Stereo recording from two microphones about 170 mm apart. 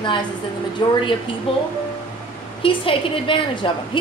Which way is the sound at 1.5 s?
35° left (ahead or behind).